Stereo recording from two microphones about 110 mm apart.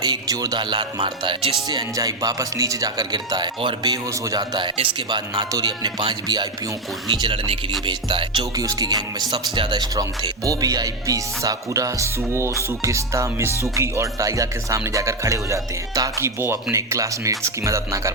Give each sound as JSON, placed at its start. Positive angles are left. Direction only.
{"t": 0.0, "sound": "speech", "side_deg": -35}
{"t": 1.6, "sound": "music", "side_deg": -35}
{"t": 3.9, "sound": "music", "side_deg": -30}
{"t": 5.3, "sound": "music", "side_deg": -30}
{"t": 7.2, "sound": "music", "side_deg": -55}
{"t": 8.5, "sound": "music", "side_deg": -35}
{"t": 13.6, "sound": "speech", "side_deg": -25}